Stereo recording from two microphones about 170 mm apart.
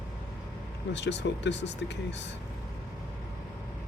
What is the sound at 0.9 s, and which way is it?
Speech, 90° left.